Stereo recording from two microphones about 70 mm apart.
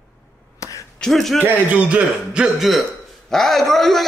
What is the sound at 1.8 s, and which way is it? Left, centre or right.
Speech, centre.